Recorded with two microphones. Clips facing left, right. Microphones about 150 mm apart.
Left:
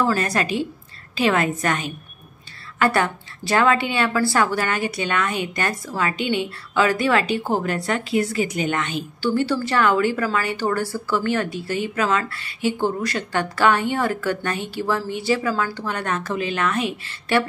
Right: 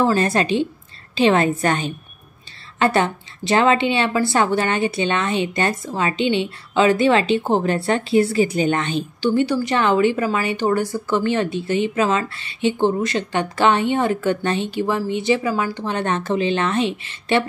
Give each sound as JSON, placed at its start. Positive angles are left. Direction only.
{"t": 0.0, "sound": "a woman's voice", "side_deg": -25}
{"t": 9.2, "sound": "a woman's voice", "side_deg": -20}